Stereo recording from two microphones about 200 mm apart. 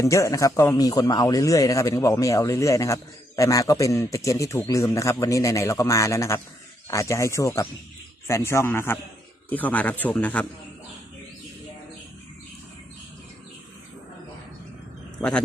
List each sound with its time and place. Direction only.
0.0 s speech: 15° left (ahead or behind)